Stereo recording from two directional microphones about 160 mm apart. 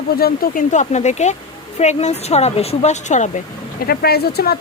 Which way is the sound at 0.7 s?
50° left (ahead or behind).